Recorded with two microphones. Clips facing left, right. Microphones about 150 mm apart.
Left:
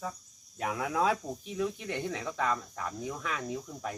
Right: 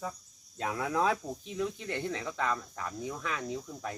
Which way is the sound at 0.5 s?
10° left (ahead or behind).